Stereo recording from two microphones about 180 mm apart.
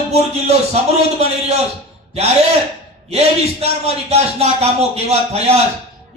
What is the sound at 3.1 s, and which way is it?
A man's voice, 35° right (ahead or behind).